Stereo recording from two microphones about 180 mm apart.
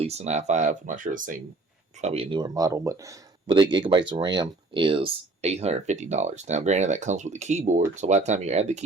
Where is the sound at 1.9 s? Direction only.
35° right (ahead or behind).